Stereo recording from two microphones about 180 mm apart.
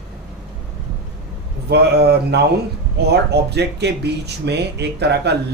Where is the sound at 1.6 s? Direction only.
60° right (ahead or behind).